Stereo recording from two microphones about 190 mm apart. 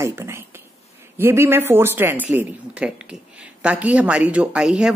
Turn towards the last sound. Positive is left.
turn(degrees=-5)  # may be behind; listen again after turning